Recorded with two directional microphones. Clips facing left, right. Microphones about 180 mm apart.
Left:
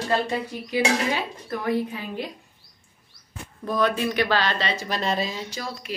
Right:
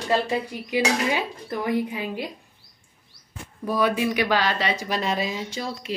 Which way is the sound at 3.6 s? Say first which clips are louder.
Right 1 dB; 10° right (ahead or behind).